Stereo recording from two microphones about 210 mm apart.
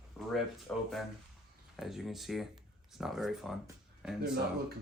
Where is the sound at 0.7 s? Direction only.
5° left (ahead or behind).